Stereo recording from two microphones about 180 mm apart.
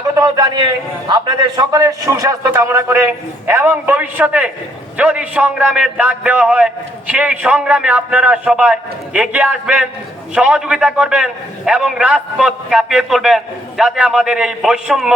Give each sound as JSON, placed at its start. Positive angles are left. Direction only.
{"t": 0.1, "sound": "a man's voice", "side_deg": -20}